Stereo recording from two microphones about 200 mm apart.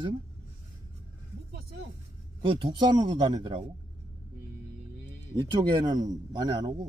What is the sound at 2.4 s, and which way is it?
A man's voice, 25° right (ahead or behind).